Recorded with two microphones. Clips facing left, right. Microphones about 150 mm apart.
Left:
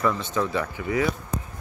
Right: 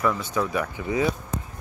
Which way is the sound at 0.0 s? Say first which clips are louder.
Even; 10° right (ahead or behind).